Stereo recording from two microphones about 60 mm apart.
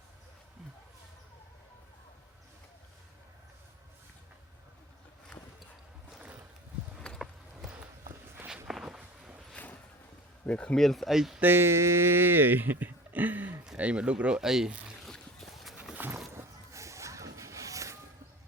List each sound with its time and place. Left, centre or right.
5.3 s a sound: centre
7.1 s horse: centre
8.6 s walk: centre
10.4 s speech: centre
10.8 s speech: centre
11.1 s speech: centre
11.3 s speech: right
13.7 s speech: centre
15.0 s a sound: centre
16.3 s a sound: right